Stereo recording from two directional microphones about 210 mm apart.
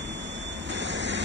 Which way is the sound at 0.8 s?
60° right (ahead or behind).